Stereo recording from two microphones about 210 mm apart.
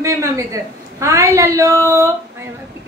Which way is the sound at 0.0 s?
15° right (ahead or behind).